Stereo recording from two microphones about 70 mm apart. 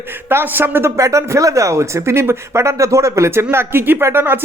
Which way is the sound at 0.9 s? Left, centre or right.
Right.